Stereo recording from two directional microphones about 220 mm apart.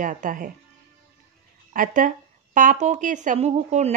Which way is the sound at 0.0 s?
35° right (ahead or behind).